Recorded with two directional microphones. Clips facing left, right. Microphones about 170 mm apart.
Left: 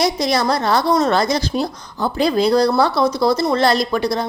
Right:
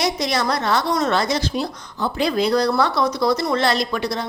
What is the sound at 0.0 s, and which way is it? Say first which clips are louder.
A woman's voice: left 4 dB; 35° left (ahead or behind).